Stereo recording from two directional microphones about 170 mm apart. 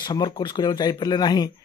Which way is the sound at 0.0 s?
25° left (ahead or behind).